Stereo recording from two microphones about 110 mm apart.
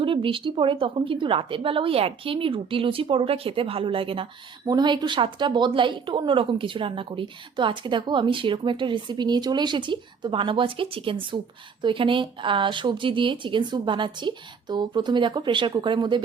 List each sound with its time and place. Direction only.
0.0 s speech: 50° right (ahead or behind)
4.6 s speech: 40° right (ahead or behind)